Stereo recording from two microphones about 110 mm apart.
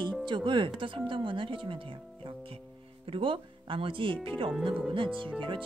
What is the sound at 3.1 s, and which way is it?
Speech, 50° right (ahead or behind).